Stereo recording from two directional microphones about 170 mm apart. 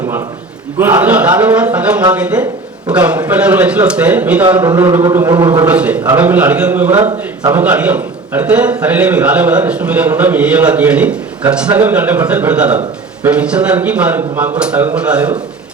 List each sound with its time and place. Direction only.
0.8 s a man's voice: 10° right (ahead or behind)
5.0 s a sound: 20° right (ahead or behind)
5.6 s a man's voice: 10° right (ahead or behind)